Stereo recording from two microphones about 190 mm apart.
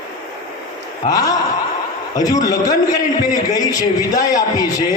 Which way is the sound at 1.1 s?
20° left (ahead or behind).